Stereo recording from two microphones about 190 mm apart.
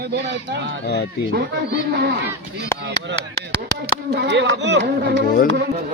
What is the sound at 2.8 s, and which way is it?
Speech, 65° right (ahead or behind).